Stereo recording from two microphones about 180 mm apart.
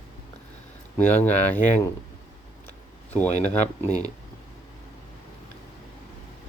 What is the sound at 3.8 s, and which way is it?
Speech, 40° left (ahead or behind).